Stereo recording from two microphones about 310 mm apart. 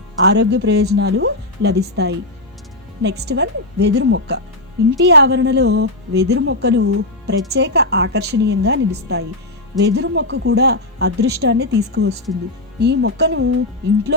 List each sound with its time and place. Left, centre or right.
0.2 s speech: right